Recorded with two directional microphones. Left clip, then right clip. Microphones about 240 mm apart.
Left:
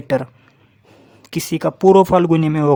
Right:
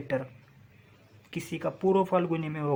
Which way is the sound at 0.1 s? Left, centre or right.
Left.